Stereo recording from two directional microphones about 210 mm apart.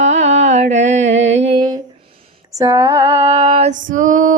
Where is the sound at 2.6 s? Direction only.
15° right (ahead or behind).